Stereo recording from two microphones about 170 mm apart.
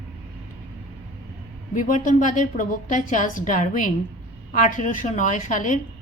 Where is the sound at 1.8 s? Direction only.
50° left (ahead or behind).